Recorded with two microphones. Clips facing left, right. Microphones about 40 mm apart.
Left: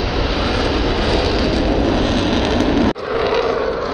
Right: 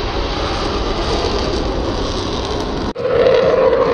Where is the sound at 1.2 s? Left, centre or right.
Centre.